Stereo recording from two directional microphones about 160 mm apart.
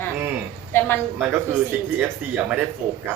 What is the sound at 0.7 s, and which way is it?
Speech, 15° left (ahead or behind).